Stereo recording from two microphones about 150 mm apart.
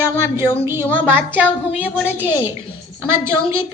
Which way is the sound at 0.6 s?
15° right (ahead or behind).